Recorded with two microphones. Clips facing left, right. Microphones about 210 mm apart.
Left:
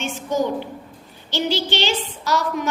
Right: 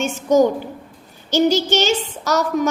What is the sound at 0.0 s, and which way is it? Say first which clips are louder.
A woman's voice: right 8 dB; 45° right (ahead or behind).